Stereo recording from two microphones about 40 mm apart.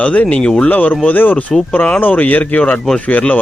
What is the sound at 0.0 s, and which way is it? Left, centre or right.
Speech, left.